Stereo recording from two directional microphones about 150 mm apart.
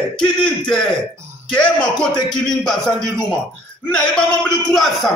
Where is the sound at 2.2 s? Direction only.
5° left (ahead or behind).